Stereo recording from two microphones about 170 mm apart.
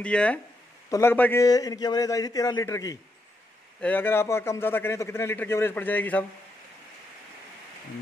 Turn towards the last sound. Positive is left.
turn(degrees=10)  # may be behind; listen again after turning